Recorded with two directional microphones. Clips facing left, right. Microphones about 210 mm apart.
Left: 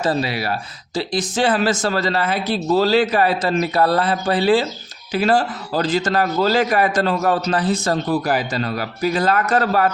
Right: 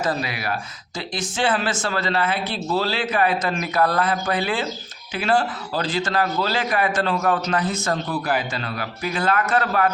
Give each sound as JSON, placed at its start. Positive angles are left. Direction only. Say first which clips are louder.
{"t": 0.0, "sound": "a man's voice", "louder": "left 4 dB", "side_deg": 30}